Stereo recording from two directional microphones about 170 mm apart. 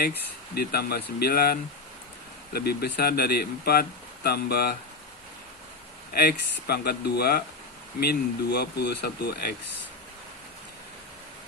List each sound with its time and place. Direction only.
0.5 s speech: 65° left (ahead or behind)
6.1 s speech: 65° left (ahead or behind)